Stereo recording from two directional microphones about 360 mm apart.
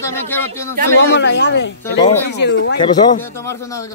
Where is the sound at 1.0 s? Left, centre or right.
Left.